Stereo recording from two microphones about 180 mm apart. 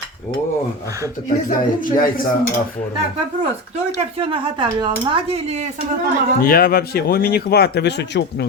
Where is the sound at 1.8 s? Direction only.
50° left (ahead or behind).